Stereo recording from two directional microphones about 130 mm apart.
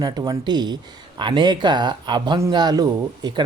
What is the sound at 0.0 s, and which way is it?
Speech, 30° right (ahead or behind).